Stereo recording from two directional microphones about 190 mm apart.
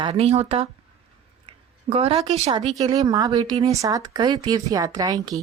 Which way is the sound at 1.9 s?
30° right (ahead or behind).